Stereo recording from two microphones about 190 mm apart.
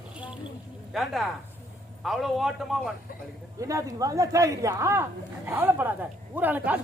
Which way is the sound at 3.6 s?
15° right (ahead or behind).